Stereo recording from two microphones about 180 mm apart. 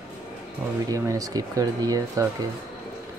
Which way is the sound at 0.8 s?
20° right (ahead or behind).